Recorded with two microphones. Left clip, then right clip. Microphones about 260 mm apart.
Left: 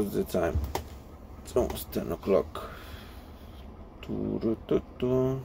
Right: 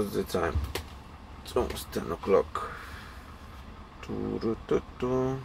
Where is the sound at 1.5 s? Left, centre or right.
Centre.